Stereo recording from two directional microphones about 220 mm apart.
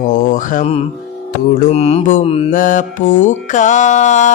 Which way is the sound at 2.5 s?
40° left (ahead or behind).